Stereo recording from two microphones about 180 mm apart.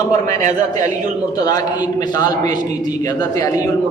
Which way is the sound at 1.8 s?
20° left (ahead or behind).